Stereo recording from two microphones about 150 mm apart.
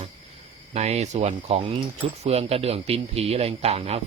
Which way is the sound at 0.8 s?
50° right (ahead or behind).